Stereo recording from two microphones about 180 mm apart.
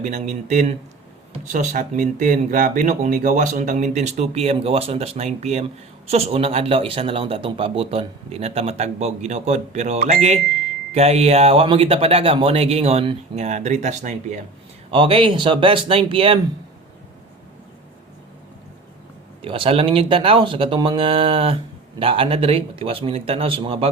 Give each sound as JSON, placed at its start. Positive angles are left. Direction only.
{"t": 0.0, "sound": "speech", "side_deg": -40}
{"t": 14.8, "sound": "speech", "side_deg": -30}
{"t": 19.4, "sound": "speech", "side_deg": -30}